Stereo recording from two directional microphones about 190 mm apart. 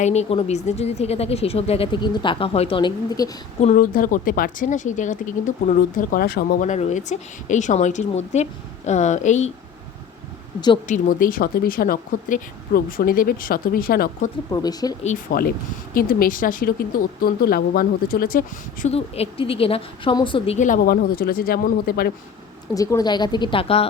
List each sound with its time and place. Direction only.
0.0 s speech: 35° left (ahead or behind)
3.6 s speech: 40° left (ahead or behind)
6.6 s speech: 40° left (ahead or behind)
10.8 s speech: 45° left (ahead or behind)
14.5 s speech: 20° left (ahead or behind)
15.0 s speech: 45° left (ahead or behind)
18.9 s speech: 30° left (ahead or behind)
20.6 s speech: 45° left (ahead or behind)
22.7 s speech: 20° left (ahead or behind)